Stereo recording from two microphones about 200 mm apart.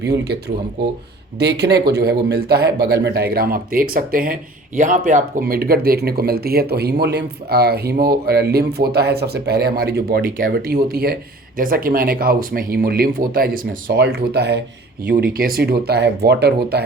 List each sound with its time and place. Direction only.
0.0 s speech: 55° right (ahead or behind)
15.0 s speech: 45° right (ahead or behind)